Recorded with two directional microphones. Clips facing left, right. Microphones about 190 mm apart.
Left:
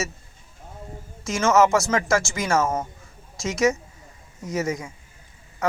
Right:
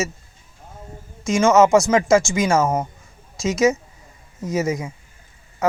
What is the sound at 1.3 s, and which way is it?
Speech, 15° right (ahead or behind).